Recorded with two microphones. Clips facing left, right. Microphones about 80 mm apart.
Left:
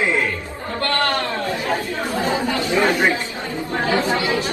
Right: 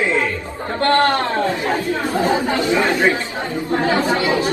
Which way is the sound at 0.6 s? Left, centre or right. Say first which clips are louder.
Right 6 dB; right.